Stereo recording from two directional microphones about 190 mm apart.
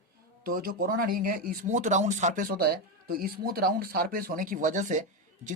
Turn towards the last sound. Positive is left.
turn(degrees=-40)  # may be behind; listen again after turning